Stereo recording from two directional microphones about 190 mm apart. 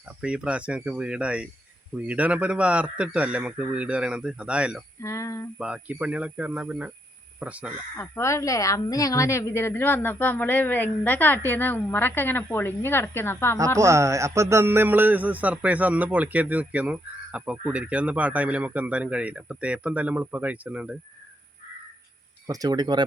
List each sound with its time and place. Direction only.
0.2 s speech: 5° right (ahead or behind)
1.9 s music: 10° right (ahead or behind)
4.9 s a woman's voice: 15° left (ahead or behind)
5.5 s music: 5° right (ahead or behind)
7.3 s speech: 5° right (ahead or behind)
7.9 s a woman's voice: 15° left (ahead or behind)
13.7 s music: 15° right (ahead or behind)
22.4 s speech: 20° right (ahead or behind)